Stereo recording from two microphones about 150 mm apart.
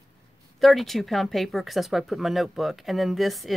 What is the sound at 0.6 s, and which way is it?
Speech, centre (ahead or behind).